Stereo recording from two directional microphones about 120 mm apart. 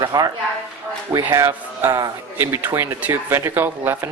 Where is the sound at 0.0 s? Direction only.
30° right (ahead or behind).